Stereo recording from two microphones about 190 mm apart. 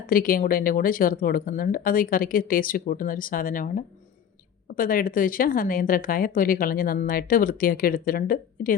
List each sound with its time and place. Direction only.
0.1 s speech: 50° left (ahead or behind)